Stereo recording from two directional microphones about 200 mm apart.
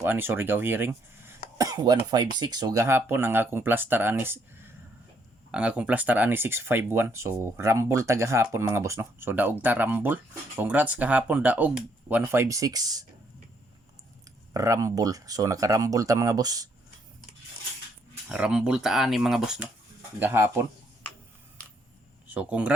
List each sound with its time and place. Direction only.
0.0 s speech: 10° right (ahead or behind)
5.5 s speech: 5° right (ahead or behind)
14.5 s speech: 15° right (ahead or behind)
18.3 s speech: 5° right (ahead or behind)
22.3 s speech: 5° right (ahead or behind)